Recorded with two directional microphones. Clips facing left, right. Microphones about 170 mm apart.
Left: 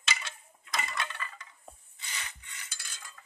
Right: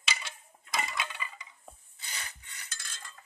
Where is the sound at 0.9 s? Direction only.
10° right (ahead or behind).